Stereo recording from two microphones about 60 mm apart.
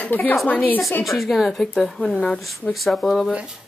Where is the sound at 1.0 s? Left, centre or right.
Centre.